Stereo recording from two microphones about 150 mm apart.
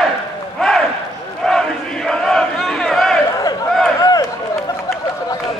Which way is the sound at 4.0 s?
25° left (ahead or behind).